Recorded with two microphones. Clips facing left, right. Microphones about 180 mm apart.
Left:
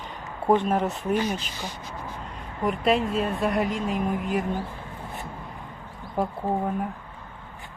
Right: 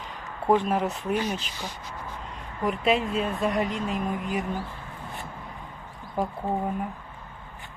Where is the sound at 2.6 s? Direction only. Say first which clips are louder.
Left 1 dB; centre (ahead or behind).